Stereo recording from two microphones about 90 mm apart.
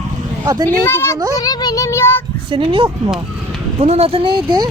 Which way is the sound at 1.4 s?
45° left (ahead or behind).